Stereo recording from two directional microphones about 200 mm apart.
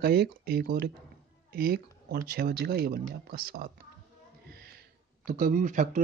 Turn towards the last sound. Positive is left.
turn(degrees=-40)  # may be behind; listen again after turning